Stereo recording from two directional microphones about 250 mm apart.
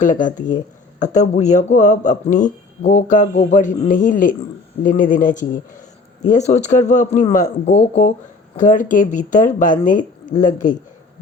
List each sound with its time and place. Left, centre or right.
0.0 s speech: left